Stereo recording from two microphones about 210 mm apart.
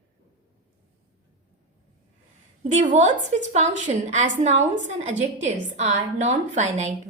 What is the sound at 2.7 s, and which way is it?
A woman's voice, 35° right (ahead or behind).